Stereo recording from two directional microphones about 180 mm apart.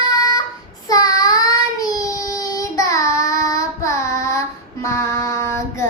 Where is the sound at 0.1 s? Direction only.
20° left (ahead or behind).